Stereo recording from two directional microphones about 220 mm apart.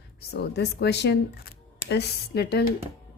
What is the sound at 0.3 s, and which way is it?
A woman's voice, 50° left (ahead or behind).